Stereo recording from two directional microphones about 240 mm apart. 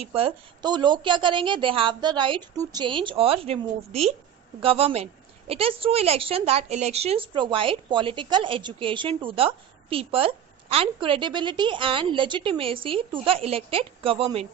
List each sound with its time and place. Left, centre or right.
0.0 s a woman's voice: right